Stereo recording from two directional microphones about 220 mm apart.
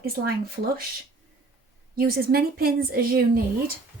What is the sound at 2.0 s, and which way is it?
Speech, 45° right (ahead or behind).